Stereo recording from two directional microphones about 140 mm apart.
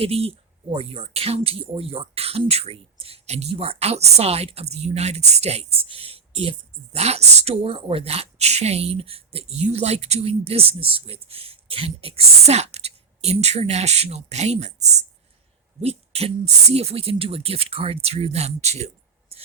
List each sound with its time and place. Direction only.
0.0 s speech: 45° right (ahead or behind)